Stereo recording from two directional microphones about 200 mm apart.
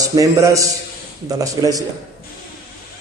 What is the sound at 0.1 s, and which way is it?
A man's voice, 15° right (ahead or behind).